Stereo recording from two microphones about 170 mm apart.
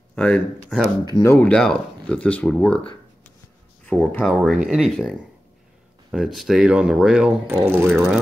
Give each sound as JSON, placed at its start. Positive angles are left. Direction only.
{"t": 0.1, "sound": "speech", "side_deg": 5}
{"t": 3.8, "sound": "speech", "side_deg": 5}
{"t": 6.1, "sound": "speech", "side_deg": 0}